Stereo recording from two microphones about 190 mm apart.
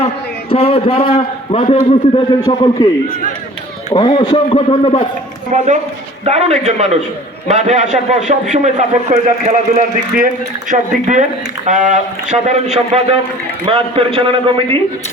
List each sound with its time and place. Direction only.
0.5 s a man's voice: 30° left (ahead or behind)
2.4 s a man's voice: 20° left (ahead or behind)
3.9 s a man's voice: 20° left (ahead or behind)
5.5 s a man's voice: 40° right (ahead or behind)